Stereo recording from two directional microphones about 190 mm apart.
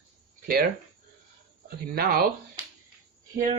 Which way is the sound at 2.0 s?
50° right (ahead or behind).